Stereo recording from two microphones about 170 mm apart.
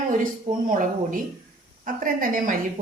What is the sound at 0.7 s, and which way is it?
A woman's voice, 50° right (ahead or behind).